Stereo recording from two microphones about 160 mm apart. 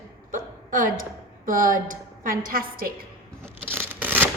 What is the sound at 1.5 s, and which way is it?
A woman's voice, 55° right (ahead or behind).